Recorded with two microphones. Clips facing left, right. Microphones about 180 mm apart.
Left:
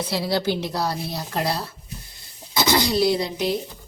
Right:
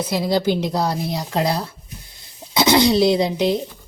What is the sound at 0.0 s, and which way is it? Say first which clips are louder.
A woman's voice: right 4 dB; 15° right (ahead or behind).